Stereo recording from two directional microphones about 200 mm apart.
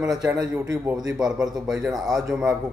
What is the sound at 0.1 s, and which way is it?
A man's voice, 20° right (ahead or behind).